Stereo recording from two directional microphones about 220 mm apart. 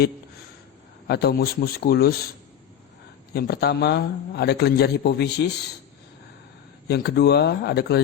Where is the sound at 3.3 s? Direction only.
45° left (ahead or behind).